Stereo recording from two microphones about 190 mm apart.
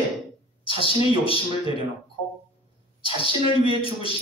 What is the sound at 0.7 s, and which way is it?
A man's voice, 30° left (ahead or behind).